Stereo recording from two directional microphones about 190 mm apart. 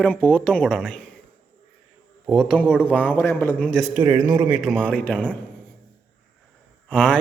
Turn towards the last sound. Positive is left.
turn(degrees=5)  # may be behind; listen again after turning